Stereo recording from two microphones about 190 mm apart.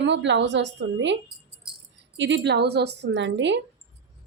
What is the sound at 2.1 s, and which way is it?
A woman's voice, 70° right (ahead or behind).